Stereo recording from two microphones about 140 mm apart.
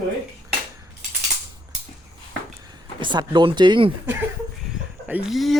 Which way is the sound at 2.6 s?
30° right (ahead or behind).